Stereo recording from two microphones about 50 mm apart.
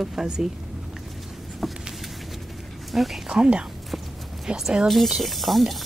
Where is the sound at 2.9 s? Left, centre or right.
Centre.